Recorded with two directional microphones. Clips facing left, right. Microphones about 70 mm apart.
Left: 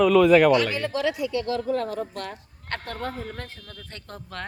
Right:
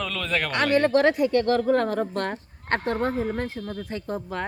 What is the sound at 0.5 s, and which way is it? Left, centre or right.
Speech, right.